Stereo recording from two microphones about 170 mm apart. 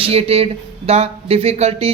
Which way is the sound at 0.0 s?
35° right (ahead or behind).